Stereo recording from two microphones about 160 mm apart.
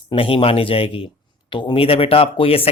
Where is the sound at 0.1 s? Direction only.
35° left (ahead or behind).